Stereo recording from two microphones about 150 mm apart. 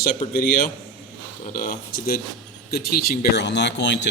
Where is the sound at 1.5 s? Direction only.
70° left (ahead or behind).